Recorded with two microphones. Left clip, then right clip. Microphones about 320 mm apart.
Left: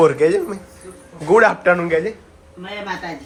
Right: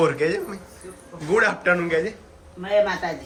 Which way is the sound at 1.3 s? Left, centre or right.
Centre.